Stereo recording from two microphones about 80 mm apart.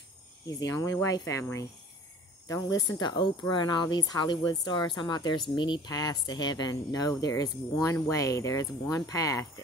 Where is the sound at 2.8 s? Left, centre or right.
Left.